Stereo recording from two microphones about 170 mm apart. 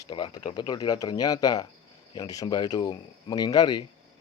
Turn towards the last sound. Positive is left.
turn(degrees=25)  # may be behind; listen again after turning